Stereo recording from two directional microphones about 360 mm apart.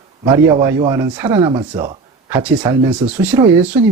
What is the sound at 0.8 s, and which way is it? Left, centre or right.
Speech, centre.